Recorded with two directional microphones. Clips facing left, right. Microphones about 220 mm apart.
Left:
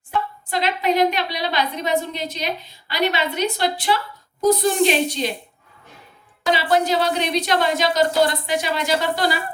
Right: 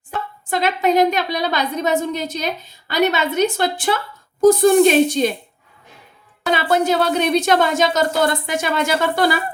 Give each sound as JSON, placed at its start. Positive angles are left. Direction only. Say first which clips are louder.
{"t": 0.1, "sound": "a woman's voice", "louder": "right 1 dB", "side_deg": -50}
{"t": 6.4, "sound": "a woman's voice", "louder": "right 1 dB", "side_deg": -55}